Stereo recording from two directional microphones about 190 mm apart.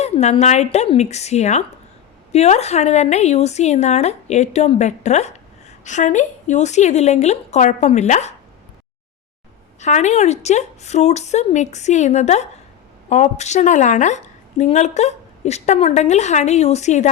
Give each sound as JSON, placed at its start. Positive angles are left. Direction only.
{"t": 0.0, "sound": "a woman's voice", "side_deg": 35}
{"t": 9.8, "sound": "a woman's voice", "side_deg": 35}